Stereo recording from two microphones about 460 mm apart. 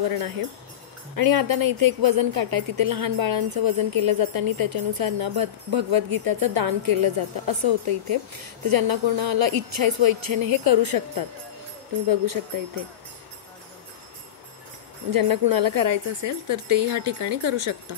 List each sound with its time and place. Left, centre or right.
1.1 s a woman's voice: right
15.0 s a woman's voice: right